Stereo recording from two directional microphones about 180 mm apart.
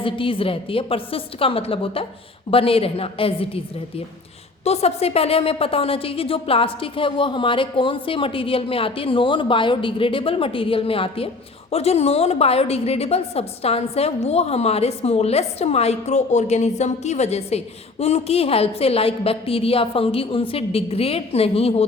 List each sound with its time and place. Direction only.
0.0 s a woman's voice: 30° left (ahead or behind)